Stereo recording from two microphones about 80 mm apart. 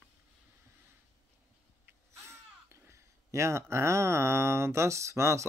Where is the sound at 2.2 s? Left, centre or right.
Right.